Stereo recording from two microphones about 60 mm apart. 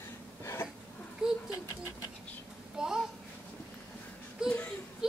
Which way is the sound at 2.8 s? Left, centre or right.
Centre.